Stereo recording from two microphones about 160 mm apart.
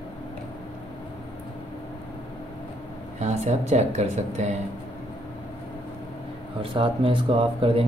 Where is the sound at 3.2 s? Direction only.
45° right (ahead or behind).